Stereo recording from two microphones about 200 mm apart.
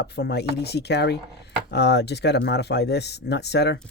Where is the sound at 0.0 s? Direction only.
55° left (ahead or behind).